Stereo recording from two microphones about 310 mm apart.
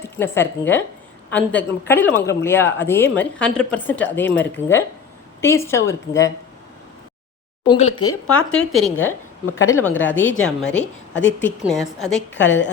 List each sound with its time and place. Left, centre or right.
0.0 s a woman's voice: centre
5.4 s speech: centre
7.7 s speech: centre
7.9 s speech: left
8.4 s speech: centre
11.1 s a woman's voice: left
11.3 s speech: centre
12.3 s a woman's voice: left